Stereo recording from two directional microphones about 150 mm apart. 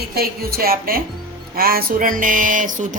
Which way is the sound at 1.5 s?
80° right.